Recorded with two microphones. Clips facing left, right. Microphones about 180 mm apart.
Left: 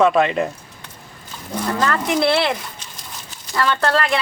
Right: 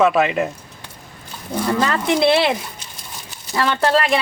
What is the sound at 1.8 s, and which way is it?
Speech, 20° right (ahead or behind).